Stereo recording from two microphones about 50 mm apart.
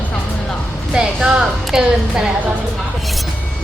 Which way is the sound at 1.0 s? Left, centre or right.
Centre.